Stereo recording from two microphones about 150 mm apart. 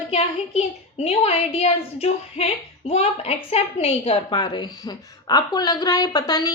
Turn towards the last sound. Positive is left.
turn(degrees=25)  # may be behind; listen again after turning